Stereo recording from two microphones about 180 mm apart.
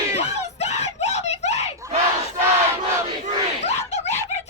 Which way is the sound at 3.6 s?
40° left (ahead or behind).